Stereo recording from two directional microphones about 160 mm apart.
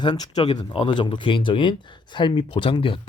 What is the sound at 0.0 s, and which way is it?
Speech, 25° left (ahead or behind).